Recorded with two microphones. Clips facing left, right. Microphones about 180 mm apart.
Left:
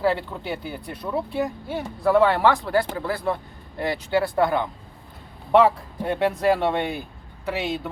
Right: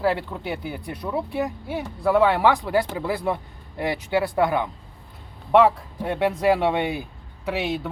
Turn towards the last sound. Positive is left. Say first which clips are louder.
# right 1 dB
turn(degrees=-5)  # may be behind; listen again after turning